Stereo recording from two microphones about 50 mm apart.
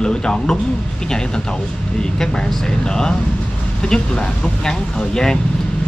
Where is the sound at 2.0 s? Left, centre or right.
Centre.